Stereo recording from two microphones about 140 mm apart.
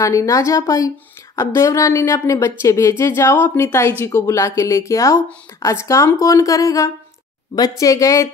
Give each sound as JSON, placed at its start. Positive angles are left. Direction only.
{"t": 0.0, "sound": "speech", "side_deg": 20}